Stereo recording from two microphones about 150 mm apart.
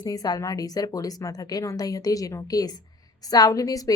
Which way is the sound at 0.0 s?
25° left (ahead or behind).